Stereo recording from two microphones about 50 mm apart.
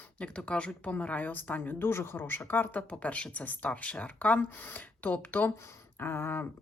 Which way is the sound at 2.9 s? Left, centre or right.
Left.